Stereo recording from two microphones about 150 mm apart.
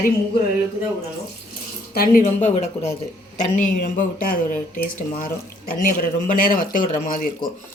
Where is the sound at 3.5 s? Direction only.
60° left (ahead or behind).